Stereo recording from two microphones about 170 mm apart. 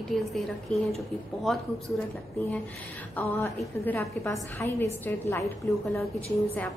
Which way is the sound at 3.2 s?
10° left (ahead or behind).